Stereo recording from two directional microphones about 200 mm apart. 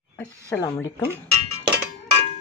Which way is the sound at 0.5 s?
10° left (ahead or behind).